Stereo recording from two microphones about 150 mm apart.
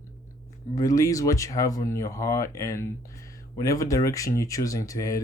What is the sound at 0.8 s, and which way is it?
Speech, 25° left (ahead or behind).